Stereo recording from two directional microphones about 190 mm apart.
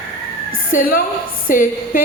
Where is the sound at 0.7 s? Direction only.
50° left (ahead or behind).